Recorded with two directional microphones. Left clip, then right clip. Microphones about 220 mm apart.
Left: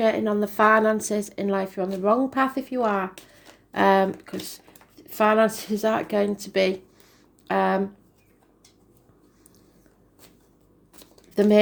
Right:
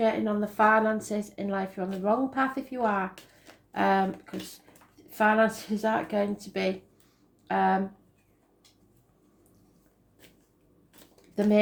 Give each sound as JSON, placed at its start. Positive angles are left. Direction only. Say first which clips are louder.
{"t": 0.0, "sound": "speech", "louder": "left 5 dB", "side_deg": 45}
{"t": 11.3, "sound": "speech", "louder": "left 6 dB", "side_deg": 45}